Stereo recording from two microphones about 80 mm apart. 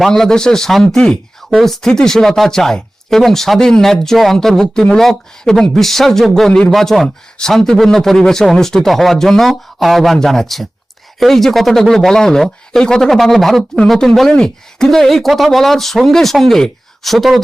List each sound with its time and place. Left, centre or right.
0.0 s speech: centre